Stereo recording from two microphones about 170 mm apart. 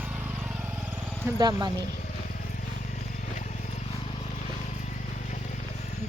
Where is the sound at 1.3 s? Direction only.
25° right (ahead or behind).